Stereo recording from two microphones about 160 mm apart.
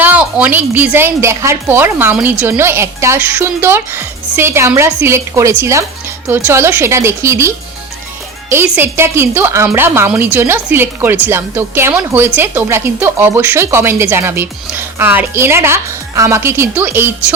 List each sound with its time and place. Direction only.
0.0 s a woman's voice: 10° right (ahead or behind)